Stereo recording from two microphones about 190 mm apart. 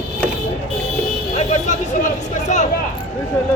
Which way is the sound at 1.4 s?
35° left (ahead or behind).